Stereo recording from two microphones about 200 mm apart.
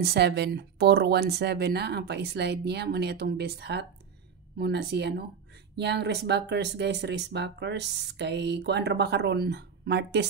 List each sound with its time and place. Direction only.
0.0 s speech: 55° right (ahead or behind)